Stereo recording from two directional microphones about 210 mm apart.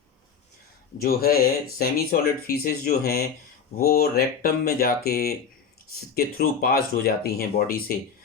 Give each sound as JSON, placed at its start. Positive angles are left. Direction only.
{"t": 1.0, "sound": "speech", "side_deg": 45}